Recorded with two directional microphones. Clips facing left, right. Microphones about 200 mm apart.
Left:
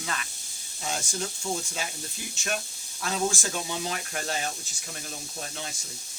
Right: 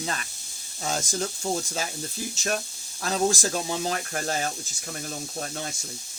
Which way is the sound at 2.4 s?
40° right (ahead or behind).